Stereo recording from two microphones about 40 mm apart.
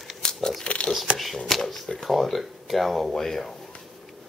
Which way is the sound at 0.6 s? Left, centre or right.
Left.